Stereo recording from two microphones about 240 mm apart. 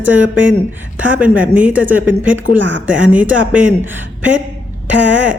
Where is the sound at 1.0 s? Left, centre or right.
Centre.